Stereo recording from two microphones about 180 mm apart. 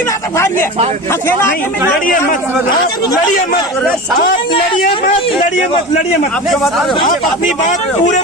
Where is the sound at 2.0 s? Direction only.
50° left (ahead or behind).